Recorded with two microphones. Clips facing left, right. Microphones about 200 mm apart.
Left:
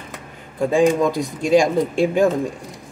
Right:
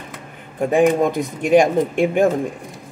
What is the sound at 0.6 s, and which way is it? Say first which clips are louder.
Speech: right 1 dB; 20° right (ahead or behind).